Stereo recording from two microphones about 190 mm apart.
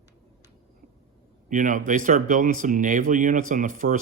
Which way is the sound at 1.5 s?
45° right (ahead or behind).